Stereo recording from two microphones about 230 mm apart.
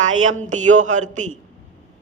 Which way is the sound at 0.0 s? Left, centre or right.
Right.